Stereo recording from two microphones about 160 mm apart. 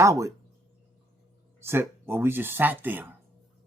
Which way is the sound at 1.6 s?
15° right (ahead or behind).